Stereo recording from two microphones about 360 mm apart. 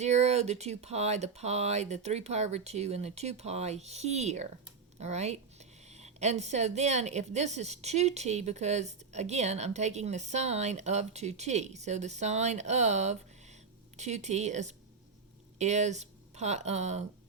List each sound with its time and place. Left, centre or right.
0.0 s speech: centre